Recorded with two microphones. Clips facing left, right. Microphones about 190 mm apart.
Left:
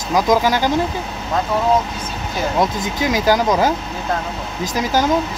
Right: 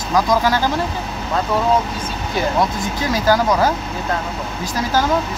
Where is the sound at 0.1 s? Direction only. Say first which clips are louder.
Left 1 dB; 15° left (ahead or behind).